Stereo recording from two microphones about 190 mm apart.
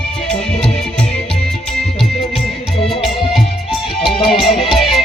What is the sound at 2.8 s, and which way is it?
Music, centre (ahead or behind).